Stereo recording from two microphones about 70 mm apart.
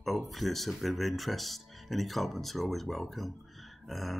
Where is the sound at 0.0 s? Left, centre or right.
Centre.